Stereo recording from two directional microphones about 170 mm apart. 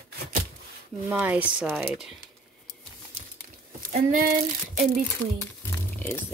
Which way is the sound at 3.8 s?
55° right (ahead or behind).